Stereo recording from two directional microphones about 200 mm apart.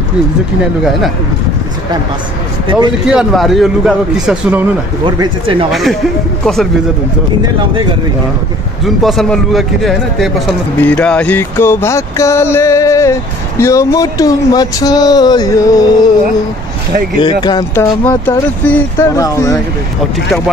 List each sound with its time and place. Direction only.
3.1 s a man's voice: centre (ahead or behind)
5.0 s speech: 25° right (ahead or behind)
5.7 s a man's voice: centre (ahead or behind)
8.8 s a man's voice: centre (ahead or behind); by 15.8 s 15° left (ahead or behind)
17.2 s speech: 20° left (ahead or behind)
18.0 s speech: 10° left (ahead or behind)